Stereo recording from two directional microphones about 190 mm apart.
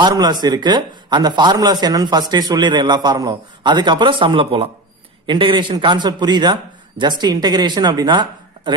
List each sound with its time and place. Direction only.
0.0 s speech: 20° right (ahead or behind)